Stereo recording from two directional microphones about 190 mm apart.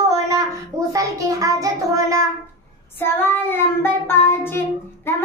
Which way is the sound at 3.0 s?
10° left (ahead or behind).